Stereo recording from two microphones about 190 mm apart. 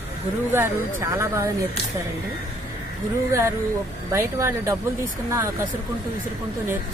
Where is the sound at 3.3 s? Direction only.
15° right (ahead or behind).